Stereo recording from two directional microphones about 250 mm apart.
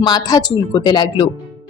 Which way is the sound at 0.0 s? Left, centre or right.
Centre.